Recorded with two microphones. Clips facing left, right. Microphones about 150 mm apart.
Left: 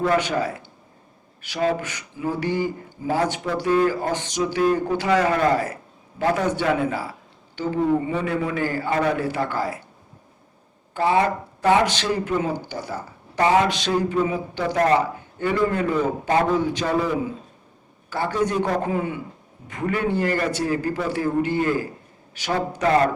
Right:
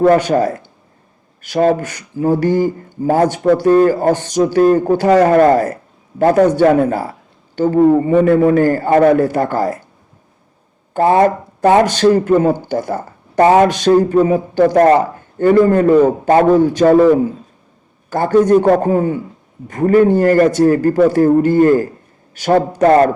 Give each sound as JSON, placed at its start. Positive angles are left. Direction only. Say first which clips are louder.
{"t": 0.0, "sound": "speech", "louder": "right 10 dB", "side_deg": -45}
{"t": 10.9, "sound": "speech", "louder": "right 8 dB", "side_deg": -50}